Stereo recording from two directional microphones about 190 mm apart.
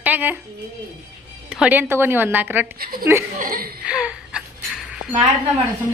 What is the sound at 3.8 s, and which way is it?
Gasp, 5° right (ahead or behind).